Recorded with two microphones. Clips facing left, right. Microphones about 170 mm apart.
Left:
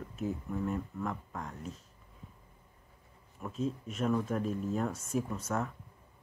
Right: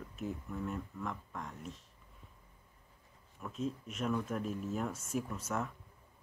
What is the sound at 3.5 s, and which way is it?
Speech, centre (ahead or behind).